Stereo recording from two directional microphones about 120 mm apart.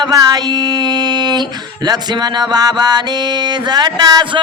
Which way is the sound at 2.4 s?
35° right (ahead or behind).